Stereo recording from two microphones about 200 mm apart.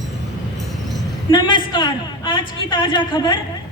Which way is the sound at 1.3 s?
25° left (ahead or behind).